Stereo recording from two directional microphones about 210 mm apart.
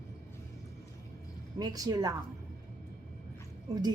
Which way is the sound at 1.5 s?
20° right (ahead or behind).